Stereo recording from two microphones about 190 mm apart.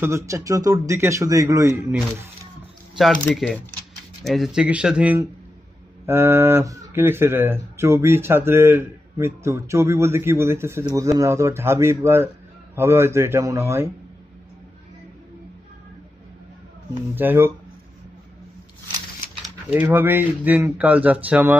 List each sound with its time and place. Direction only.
0.0 s speech: 15° right (ahead or behind)
1.9 s speech: 5° right (ahead or behind)
17.1 s speech: 10° right (ahead or behind)
19.4 s speech: 10° right (ahead or behind)